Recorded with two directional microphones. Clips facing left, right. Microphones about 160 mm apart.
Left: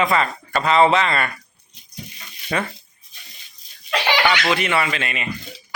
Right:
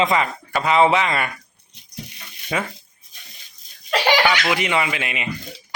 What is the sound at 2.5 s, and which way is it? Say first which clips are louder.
Speech: left 1 dB; 10° right (ahead or behind).